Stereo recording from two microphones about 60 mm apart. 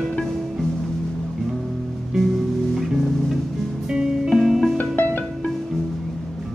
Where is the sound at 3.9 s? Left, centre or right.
Centre.